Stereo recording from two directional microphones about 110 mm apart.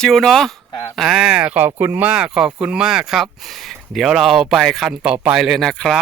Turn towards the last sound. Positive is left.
turn(degrees=5)  # may be behind; listen again after turning